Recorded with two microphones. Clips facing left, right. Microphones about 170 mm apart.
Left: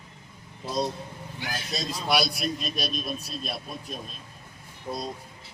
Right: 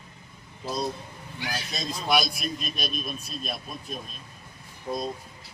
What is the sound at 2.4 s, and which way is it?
Speech, 35° left (ahead or behind).